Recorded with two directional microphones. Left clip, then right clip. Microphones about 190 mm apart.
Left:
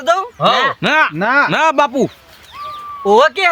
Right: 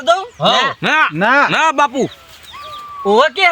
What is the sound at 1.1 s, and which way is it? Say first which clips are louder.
Speech: right 1 dB; 40° right (ahead or behind).